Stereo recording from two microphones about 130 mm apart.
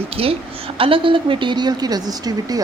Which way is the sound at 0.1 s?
45° right (ahead or behind).